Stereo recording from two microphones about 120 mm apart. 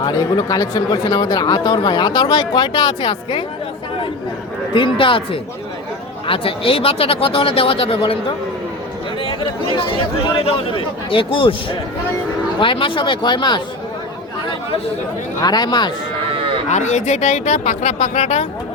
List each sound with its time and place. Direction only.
0.0 s speech: 30° left (ahead or behind)
4.7 s speech: 45° left (ahead or behind)
9.2 s chatter: 45° left (ahead or behind)
10.3 s speech: 45° left (ahead or behind)
15.4 s speech: 35° left (ahead or behind)
16.6 s speech: 70° left (ahead or behind)